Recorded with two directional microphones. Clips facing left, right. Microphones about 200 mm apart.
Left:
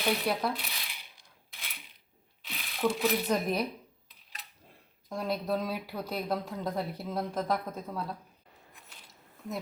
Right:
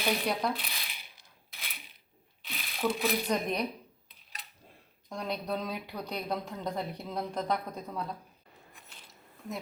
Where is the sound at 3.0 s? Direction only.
5° left (ahead or behind).